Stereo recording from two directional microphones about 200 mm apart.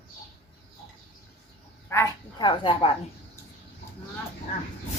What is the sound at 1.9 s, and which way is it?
Dog, 15° left (ahead or behind).